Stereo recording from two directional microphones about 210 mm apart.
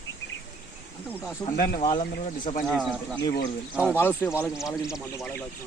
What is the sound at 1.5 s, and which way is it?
Speech, 45° left (ahead or behind).